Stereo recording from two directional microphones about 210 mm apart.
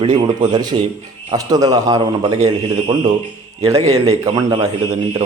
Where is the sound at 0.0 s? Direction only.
20° right (ahead or behind).